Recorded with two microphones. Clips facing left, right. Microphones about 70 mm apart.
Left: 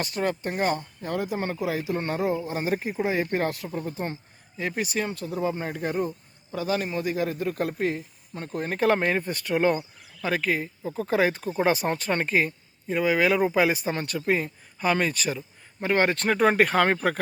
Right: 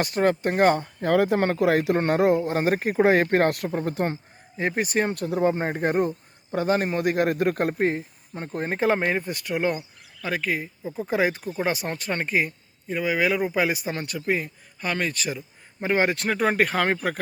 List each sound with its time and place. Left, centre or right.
0.0 s speech: right
1.0 s speech: right
1.5 s speech: right
2.0 s speech: right
4.1 s speech: right
7.8 s speech: right
8.9 s speech: centre
15.4 s speech: centre